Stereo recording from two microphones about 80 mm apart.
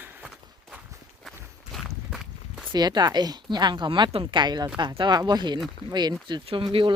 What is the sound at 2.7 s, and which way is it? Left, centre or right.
A woman's voice, right.